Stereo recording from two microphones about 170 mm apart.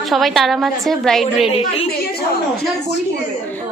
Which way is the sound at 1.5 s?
35° left (ahead or behind).